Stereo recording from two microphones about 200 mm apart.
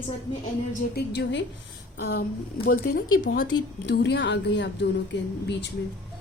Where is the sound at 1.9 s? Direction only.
50° left (ahead or behind).